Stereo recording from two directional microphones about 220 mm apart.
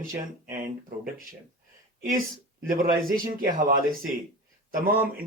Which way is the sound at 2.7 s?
40° right (ahead or behind).